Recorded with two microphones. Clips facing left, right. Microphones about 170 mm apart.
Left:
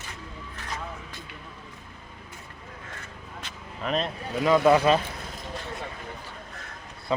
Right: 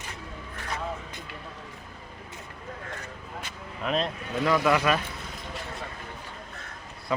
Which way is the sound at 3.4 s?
5° right (ahead or behind).